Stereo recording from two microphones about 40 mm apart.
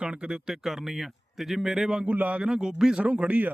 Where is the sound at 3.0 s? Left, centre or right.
Right.